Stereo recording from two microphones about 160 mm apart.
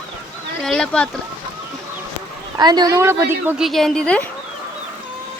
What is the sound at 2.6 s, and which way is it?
A woman's voice, 25° right (ahead or behind).